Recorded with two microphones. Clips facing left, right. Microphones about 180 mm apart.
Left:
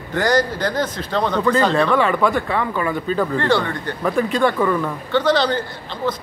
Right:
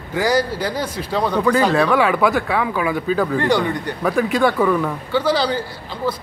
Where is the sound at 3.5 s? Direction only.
15° right (ahead or behind).